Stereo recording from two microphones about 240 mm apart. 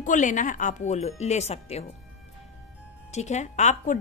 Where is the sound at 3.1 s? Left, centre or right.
Left.